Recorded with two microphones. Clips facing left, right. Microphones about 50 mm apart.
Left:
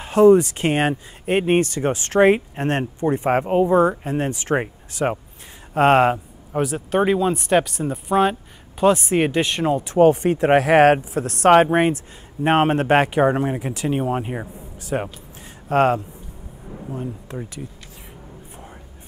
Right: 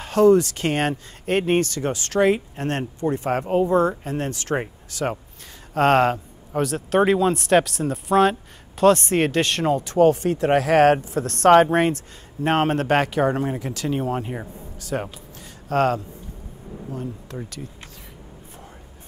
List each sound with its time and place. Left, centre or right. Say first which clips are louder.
0.0 s speech: left 3 dB; centre
9.8 s speech: left 3 dB; centre